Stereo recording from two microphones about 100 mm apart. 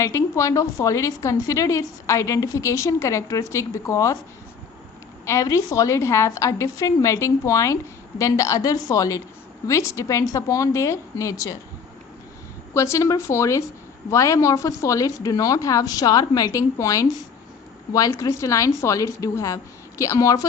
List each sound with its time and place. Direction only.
0.0 s a woman's voice: 30° left (ahead or behind)
5.2 s a woman's voice: 30° left (ahead or behind)
12.7 s a woman's voice: 30° left (ahead or behind)
18.1 s a woman's voice: 30° left (ahead or behind)